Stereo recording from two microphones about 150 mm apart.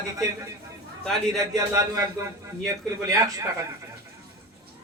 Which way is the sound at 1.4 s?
20° right (ahead or behind).